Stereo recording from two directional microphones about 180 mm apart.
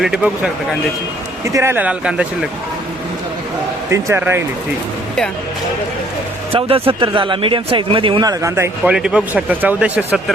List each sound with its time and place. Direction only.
0.0 s speech: 5° right (ahead or behind)
1.5 s speech: 15° right (ahead or behind)
3.8 s speech: 15° right (ahead or behind)
6.5 s speech: 30° right (ahead or behind); by 10.3 s 5° right (ahead or behind)